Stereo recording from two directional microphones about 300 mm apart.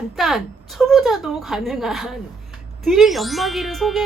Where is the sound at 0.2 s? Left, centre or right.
Centre.